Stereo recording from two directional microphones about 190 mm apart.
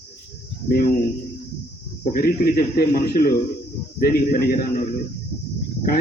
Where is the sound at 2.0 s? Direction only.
50° left (ahead or behind).